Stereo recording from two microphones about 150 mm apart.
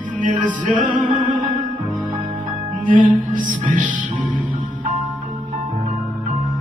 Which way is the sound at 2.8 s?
60° right (ahead or behind).